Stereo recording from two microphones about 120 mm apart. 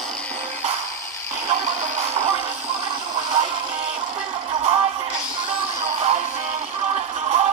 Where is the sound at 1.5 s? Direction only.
65° right (ahead or behind).